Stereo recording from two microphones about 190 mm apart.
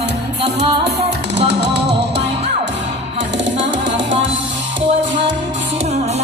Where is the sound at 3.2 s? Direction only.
70° right (ahead or behind).